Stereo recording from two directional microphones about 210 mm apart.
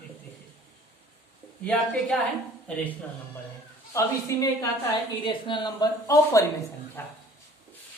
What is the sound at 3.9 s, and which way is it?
A woman's voice, 15° left (ahead or behind).